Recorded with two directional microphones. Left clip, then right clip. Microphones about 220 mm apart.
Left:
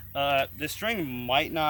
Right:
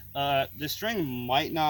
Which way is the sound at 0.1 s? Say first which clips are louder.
Left 1 dB; 10° left (ahead or behind).